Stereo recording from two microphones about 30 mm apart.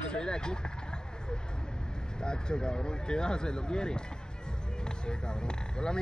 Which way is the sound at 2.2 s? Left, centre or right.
Left.